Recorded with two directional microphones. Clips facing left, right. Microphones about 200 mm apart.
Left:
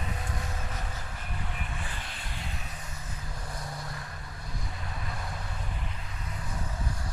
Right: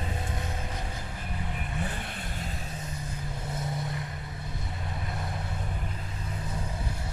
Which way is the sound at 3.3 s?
25° right (ahead or behind).